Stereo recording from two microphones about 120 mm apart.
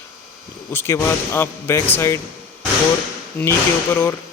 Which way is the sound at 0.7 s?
20° left (ahead or behind).